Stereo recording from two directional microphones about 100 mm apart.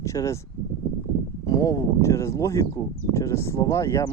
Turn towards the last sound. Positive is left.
turn(degrees=30)  # may be behind; listen again after turning